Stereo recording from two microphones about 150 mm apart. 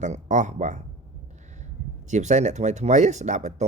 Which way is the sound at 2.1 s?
50° right (ahead or behind).